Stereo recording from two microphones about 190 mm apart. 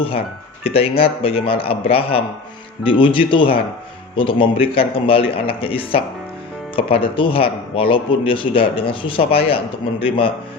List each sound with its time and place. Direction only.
0.6 s speech: 30° left (ahead or behind)